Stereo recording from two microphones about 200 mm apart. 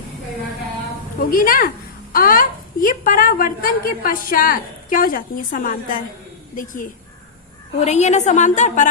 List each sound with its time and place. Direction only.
1.2 s a woman's voice: 45° left (ahead or behind)
7.8 s a woman's voice: 35° left (ahead or behind)